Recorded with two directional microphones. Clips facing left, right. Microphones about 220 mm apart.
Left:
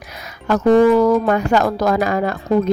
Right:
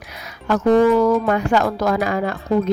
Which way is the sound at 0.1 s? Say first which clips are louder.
Left 2 dB; 45° left (ahead or behind).